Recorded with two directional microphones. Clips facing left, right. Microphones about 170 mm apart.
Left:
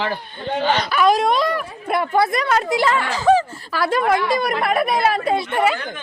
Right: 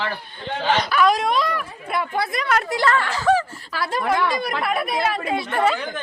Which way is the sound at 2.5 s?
20° left (ahead or behind).